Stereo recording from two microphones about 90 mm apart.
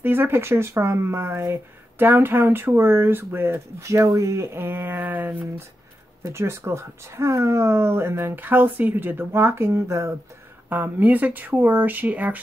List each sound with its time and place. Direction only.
0.0 s speech: 25° right (ahead or behind)
6.2 s speech: 30° right (ahead or behind)
10.7 s speech: 20° right (ahead or behind)